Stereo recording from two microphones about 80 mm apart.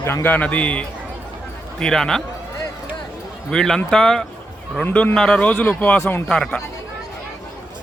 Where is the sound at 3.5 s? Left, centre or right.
Centre.